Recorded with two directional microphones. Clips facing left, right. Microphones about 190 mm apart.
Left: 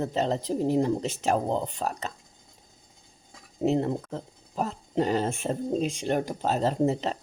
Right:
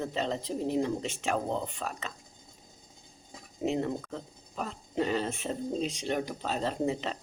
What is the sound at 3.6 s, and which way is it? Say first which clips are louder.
Speech: left 5 dB; 35° left (ahead or behind).